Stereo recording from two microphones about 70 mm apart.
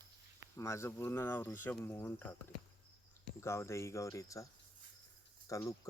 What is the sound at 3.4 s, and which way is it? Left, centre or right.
Speech, left.